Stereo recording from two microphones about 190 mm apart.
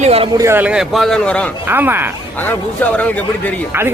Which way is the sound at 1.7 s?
10° right (ahead or behind).